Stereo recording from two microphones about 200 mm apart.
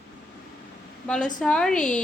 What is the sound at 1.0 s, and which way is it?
Speech, 5° left (ahead or behind).